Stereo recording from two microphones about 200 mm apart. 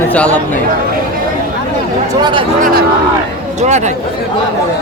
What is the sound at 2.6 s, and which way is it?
Speech, 50° right (ahead or behind).